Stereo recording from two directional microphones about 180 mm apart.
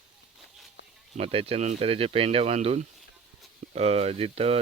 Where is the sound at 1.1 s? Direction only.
30° right (ahead or behind).